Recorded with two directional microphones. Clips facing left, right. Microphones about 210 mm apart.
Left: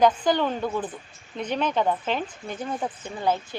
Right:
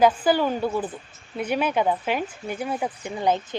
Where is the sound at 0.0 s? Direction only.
5° right (ahead or behind).